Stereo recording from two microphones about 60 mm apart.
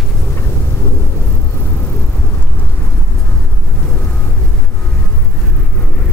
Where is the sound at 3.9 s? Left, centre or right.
Centre.